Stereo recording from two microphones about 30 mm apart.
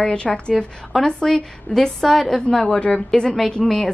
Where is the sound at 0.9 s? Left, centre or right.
Centre.